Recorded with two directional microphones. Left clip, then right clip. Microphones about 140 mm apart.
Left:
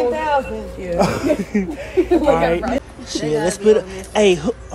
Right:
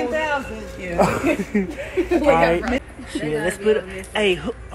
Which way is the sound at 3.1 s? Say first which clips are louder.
Left 4 dB; 30° left (ahead or behind).